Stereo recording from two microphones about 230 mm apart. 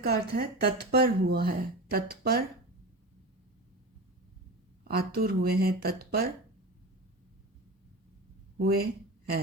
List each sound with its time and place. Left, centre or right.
0.0 s speech: right
4.8 s speech: right
8.5 s speech: right